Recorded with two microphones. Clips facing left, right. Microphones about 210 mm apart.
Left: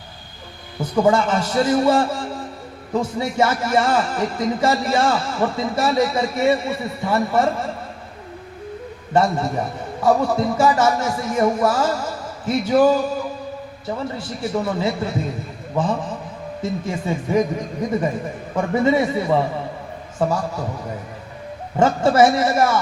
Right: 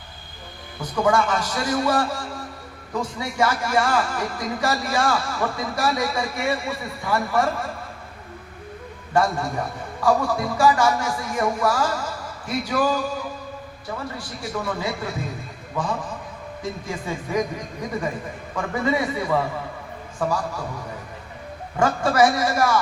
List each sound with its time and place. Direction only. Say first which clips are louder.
0.8 s a man's voice: left 4 dB; 25° left (ahead or behind)
9.1 s a man's voice: left 3 dB; 25° left (ahead or behind)
18.5 s a man's voice: left 6 dB; 25° left (ahead or behind)
21.8 s a man's voice: left 4 dB; 25° left (ahead or behind)